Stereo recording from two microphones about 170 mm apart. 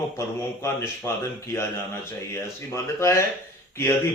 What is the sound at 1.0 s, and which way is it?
Speech, 15° left (ahead or behind).